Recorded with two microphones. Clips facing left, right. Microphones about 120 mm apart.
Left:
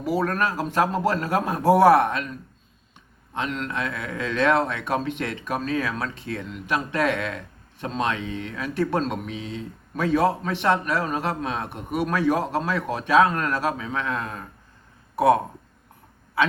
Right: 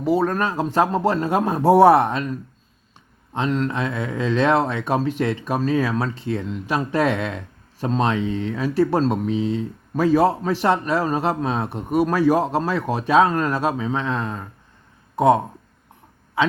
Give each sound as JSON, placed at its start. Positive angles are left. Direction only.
{"t": 0.0, "sound": "a man's voice", "side_deg": -25}
{"t": 3.3, "sound": "a man's voice", "side_deg": -35}
{"t": 15.1, "sound": "a sound", "side_deg": -20}